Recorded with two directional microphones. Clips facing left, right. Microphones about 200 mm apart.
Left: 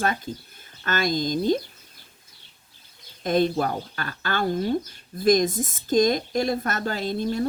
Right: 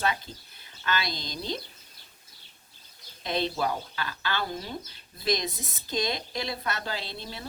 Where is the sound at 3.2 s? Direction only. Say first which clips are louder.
Left 7 dB; 50° left (ahead or behind).